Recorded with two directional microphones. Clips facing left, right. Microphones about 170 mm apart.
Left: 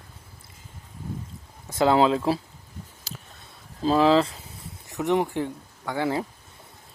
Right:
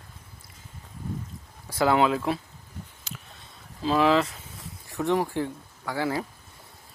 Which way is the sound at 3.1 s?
35° left (ahead or behind).